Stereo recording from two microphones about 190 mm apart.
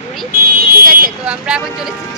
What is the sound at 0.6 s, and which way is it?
Speech, 50° right (ahead or behind).